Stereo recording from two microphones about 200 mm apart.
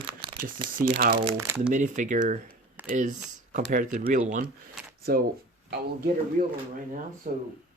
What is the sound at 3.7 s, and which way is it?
Speech, 40° right (ahead or behind).